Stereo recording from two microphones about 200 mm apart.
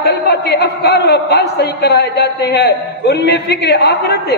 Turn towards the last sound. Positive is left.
turn(degrees=55)  # may be behind; listen again after turning